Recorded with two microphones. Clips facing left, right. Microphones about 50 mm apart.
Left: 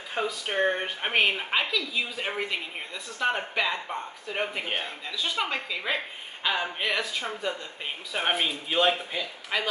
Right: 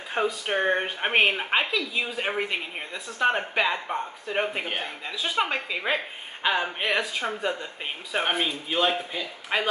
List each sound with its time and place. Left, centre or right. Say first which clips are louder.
0.1 s speech: right 3 dB; centre
8.2 s speech: right 1 dB; centre
9.5 s a woman's voice: right 3 dB; right